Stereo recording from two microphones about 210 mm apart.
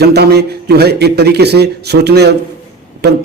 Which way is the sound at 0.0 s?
50° right (ahead or behind).